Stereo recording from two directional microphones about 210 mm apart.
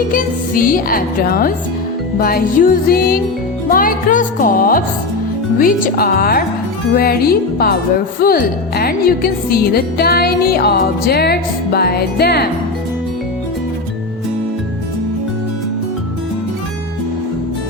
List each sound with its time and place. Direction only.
0.1 s speech: 40° left (ahead or behind)
3.7 s music: 40° left (ahead or behind)
5.5 s speech: 40° left (ahead or behind)